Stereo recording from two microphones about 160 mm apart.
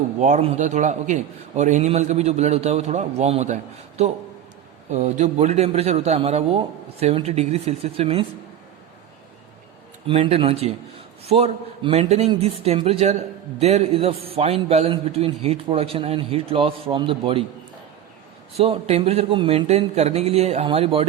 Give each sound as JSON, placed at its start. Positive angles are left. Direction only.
{"t": 0.2, "sound": "a man's voice", "side_deg": -45}
{"t": 10.1, "sound": "a man's voice", "side_deg": -35}
{"t": 18.5, "sound": "a man's voice", "side_deg": -40}